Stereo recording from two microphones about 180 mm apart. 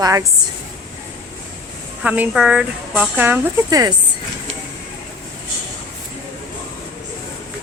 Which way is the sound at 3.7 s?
20° right (ahead or behind).